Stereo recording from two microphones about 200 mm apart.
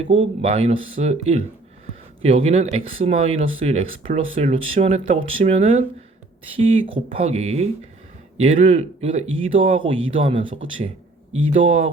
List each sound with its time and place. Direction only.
0.0 s speech: 30° right (ahead or behind)
11.5 s speech: 35° right (ahead or behind)